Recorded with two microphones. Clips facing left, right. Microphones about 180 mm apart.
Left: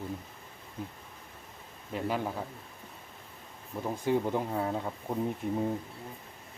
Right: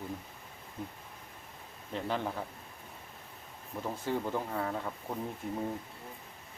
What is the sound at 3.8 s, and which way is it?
Speech, 15° left (ahead or behind).